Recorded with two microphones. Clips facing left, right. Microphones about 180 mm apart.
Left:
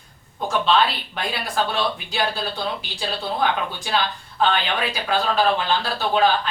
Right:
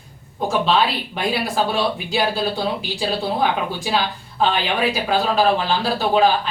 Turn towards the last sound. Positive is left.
turn(degrees=-5)  # may be behind; listen again after turning